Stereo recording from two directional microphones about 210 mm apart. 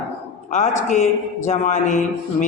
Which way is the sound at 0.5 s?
35° left (ahead or behind).